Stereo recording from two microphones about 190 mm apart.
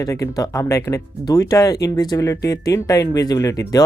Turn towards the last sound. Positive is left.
turn(degrees=20)  # may be behind; listen again after turning